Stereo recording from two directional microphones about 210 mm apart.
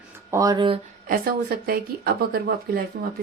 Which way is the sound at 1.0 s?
45° right (ahead or behind).